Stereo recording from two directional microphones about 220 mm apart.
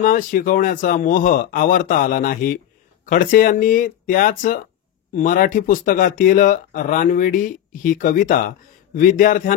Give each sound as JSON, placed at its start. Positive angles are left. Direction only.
{"t": 0.0, "sound": "speech", "side_deg": 35}